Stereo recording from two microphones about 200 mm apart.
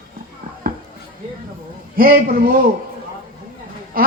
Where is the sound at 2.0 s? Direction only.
45° right (ahead or behind).